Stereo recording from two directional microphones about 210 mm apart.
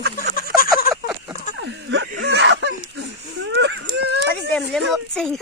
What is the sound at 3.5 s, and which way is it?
Baby cry, 55° right (ahead or behind).